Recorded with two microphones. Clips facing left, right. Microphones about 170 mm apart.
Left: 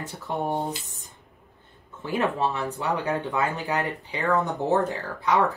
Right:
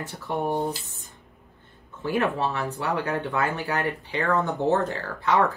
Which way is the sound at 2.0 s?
20° left (ahead or behind).